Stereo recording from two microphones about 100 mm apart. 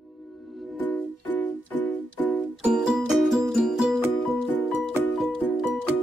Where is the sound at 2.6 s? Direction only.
5° right (ahead or behind).